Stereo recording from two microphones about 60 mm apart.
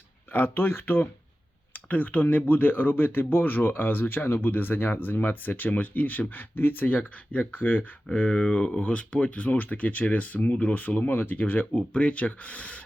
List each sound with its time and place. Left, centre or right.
0.3 s speech: left
1.9 s speech: left